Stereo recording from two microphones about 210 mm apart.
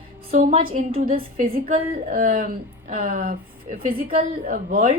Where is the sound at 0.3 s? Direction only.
35° right (ahead or behind).